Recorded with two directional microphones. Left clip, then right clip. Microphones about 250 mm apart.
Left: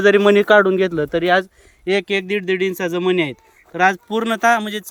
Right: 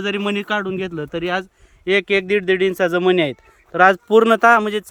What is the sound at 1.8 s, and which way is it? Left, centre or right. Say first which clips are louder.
A man's voice: right 2 dB; centre.